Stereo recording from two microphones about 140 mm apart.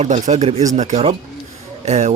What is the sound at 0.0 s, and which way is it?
Speech, 50° right (ahead or behind).